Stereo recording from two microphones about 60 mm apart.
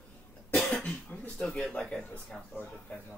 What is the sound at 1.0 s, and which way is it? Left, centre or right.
Speech, left.